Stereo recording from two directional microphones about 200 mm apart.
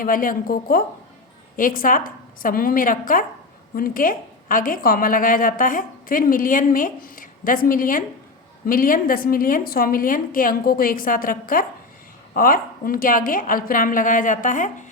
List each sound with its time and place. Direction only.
0.0 s a woman's voice: 45° left (ahead or behind)